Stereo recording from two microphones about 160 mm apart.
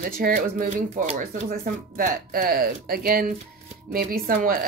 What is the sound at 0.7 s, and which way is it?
Speech, 40° right (ahead or behind).